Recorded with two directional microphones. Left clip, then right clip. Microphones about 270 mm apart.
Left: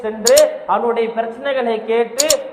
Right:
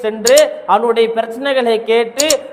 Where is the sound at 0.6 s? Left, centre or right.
Right.